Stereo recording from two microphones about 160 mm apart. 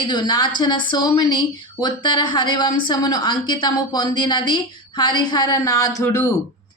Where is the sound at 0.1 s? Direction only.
30° left (ahead or behind).